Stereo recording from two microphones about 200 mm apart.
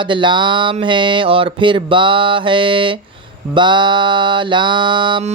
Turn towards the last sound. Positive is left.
turn(degrees=-25)  # may be behind; listen again after turning